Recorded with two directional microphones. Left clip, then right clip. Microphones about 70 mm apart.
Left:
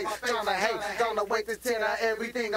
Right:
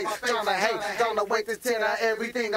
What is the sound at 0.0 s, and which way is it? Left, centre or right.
Speech, left.